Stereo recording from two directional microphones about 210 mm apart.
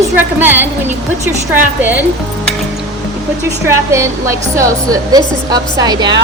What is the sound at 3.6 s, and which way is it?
A woman's voice, 15° right (ahead or behind).